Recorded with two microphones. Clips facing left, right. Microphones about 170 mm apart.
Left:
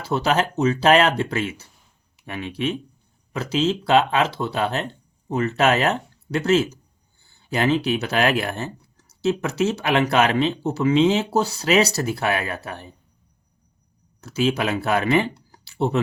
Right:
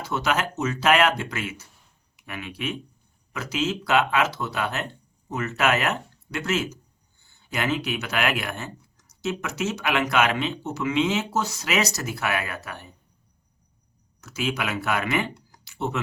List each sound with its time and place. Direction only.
0.0 s speech: 30° left (ahead or behind)
14.2 s speech: 30° left (ahead or behind)